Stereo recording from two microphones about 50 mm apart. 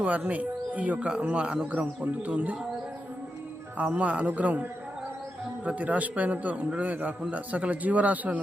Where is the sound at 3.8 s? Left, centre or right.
Right.